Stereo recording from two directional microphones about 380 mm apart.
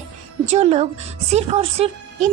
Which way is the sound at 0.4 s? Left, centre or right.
Centre.